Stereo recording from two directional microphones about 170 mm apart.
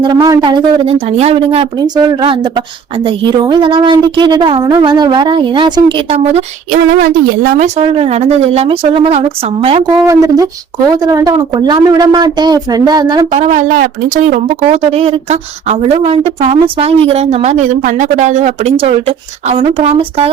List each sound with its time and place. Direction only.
0.0 s speech: 25° right (ahead or behind)
0.9 s speech: 40° right (ahead or behind)
6.7 s speech: 55° right (ahead or behind)
7.8 s a woman's voice: 35° right (ahead or behind)
10.1 s speech: 20° right (ahead or behind)
13.3 s a woman's voice: 45° right (ahead or behind)